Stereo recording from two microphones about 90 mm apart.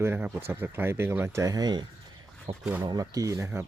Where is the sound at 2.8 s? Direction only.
45° right (ahead or behind).